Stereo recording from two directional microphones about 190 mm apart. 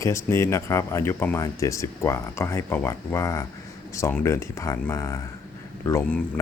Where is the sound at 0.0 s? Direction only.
15° left (ahead or behind).